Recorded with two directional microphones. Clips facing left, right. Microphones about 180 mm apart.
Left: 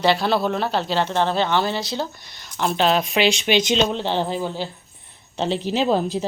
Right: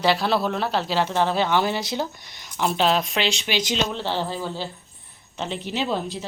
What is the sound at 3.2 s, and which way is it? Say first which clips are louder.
Speech: left 6 dB; 20° left (ahead or behind).